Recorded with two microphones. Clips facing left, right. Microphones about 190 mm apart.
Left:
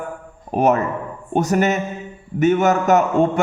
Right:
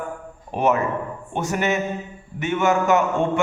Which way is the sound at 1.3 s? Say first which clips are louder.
Left 5 dB; 40° left (ahead or behind).